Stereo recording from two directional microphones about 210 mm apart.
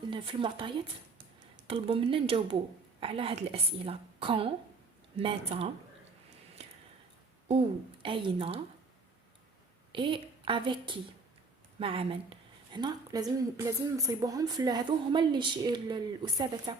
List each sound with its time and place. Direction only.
0.1 s a woman's voice: 25° right (ahead or behind)
7.4 s a woman's voice: 30° right (ahead or behind)
9.9 s a woman's voice: 25° right (ahead or behind)